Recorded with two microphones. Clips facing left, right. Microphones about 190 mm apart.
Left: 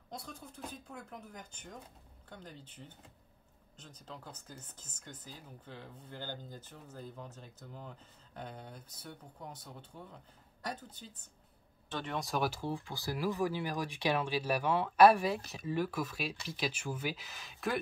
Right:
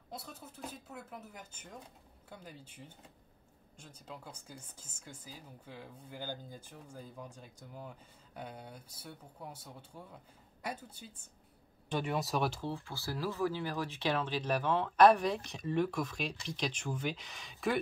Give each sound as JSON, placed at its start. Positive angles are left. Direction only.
{"t": 0.1, "sound": "speech", "side_deg": -5}